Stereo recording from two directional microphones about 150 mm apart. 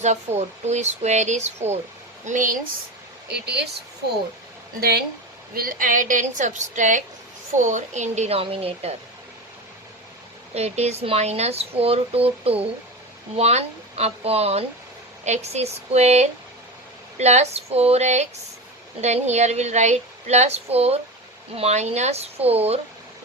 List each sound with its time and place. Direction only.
0.0 s speech: 50° right (ahead or behind)
2.2 s a woman's voice: 60° right (ahead or behind)
3.2 s speech: 90° right
4.8 s speech: 90° right
5.5 s a woman's voice: 70° right (ahead or behind); by 9.0 s 40° right (ahead or behind)
10.5 s speech: 45° right (ahead or behind)